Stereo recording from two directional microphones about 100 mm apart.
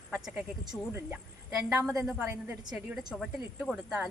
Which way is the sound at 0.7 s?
15° left (ahead or behind).